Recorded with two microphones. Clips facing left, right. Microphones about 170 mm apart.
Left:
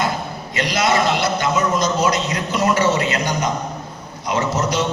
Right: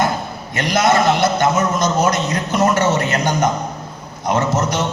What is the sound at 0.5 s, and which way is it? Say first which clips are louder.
A man's voice: right 3 dB; 50° right (ahead or behind).